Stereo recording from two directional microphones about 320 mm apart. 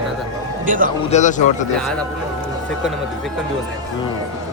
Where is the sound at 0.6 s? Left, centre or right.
Right.